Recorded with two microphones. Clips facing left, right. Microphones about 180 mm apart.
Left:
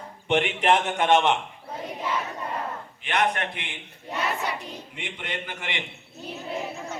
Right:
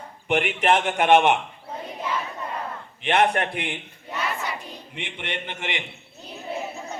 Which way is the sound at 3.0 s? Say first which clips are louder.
Right 5 dB; 30° right (ahead or behind).